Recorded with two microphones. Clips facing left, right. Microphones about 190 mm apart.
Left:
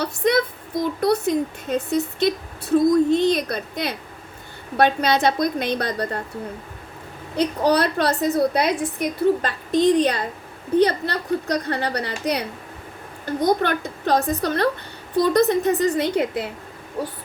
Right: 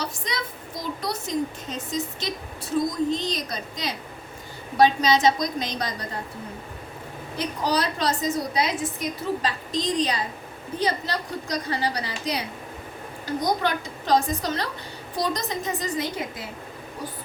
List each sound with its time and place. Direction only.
0.0 s a woman's voice: 55° left (ahead or behind)
7.3 s a woman's voice: 60° left (ahead or behind)